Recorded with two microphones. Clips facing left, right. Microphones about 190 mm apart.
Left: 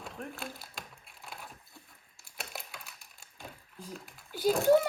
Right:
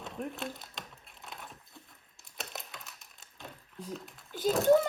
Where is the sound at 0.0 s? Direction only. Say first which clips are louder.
Right 3 dB; centre (ahead or behind).